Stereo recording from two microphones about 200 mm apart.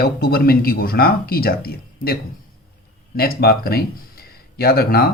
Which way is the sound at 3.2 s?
50° left (ahead or behind).